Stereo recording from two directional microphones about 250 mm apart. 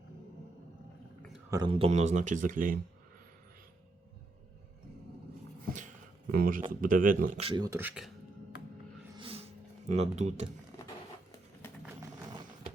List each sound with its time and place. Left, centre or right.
1.5 s speech: centre; by 2.7 s right
6.3 s speech: right; by 8.1 s centre
9.1 s music: right
9.9 s speech: right